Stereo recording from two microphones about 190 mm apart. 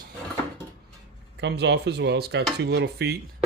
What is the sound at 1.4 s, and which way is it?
Speech, 65° right (ahead or behind).